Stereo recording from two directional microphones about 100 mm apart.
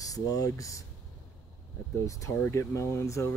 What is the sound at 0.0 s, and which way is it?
Speech, 35° left (ahead or behind).